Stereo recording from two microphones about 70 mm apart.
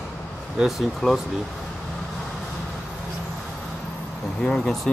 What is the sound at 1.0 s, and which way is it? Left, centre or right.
Speech, centre.